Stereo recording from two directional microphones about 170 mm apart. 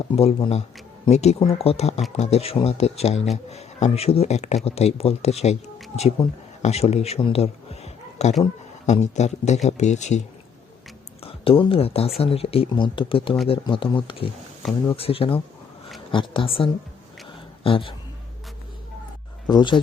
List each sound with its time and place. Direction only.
0.1 s a man's voice: 35° left (ahead or behind)
6.2 s a man's voice: 30° left (ahead or behind)
11.2 s a man's voice: 35° left (ahead or behind)
19.5 s speech: 25° left (ahead or behind)